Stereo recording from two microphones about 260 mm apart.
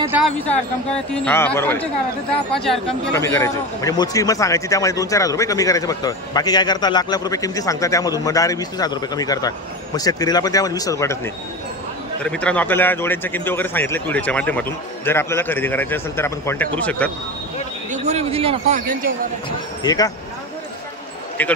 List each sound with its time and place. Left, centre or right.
0.4 s a man's voice: centre
12.3 s a man's voice: centre
17.9 s speech: right
19.8 s speech: centre
21.4 s speech: centre